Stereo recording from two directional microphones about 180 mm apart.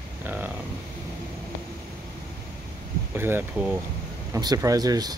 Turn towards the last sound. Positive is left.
turn(degrees=-20)  # may be behind; listen again after turning